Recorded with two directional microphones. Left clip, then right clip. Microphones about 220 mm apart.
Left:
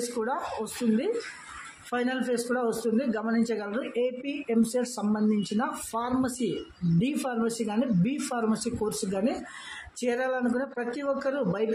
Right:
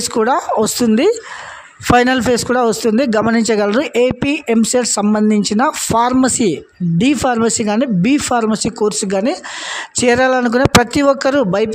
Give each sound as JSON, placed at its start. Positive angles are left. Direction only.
{"t": 0.2, "sound": "a man's voice", "side_deg": -50}